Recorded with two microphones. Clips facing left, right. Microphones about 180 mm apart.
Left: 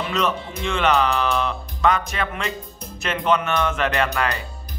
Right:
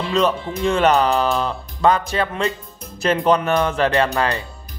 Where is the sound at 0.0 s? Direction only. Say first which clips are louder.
Right 5 dB; 30° right (ahead or behind).